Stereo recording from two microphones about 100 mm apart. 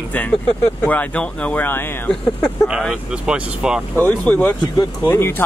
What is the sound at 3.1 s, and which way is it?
Speech, 10° right (ahead or behind).